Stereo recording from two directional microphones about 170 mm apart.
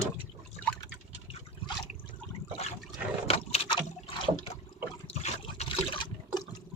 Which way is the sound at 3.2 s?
35° left (ahead or behind).